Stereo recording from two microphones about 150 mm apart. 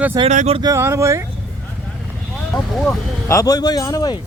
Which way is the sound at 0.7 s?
20° right (ahead or behind).